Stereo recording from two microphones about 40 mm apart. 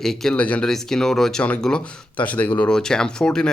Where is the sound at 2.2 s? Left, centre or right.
Left.